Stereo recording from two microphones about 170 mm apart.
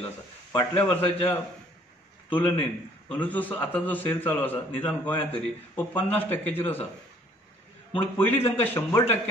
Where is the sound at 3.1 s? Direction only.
10° left (ahead or behind).